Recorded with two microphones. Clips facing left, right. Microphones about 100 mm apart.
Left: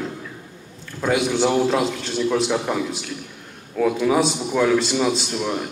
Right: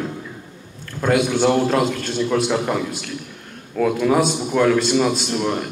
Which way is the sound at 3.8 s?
Centre (ahead or behind).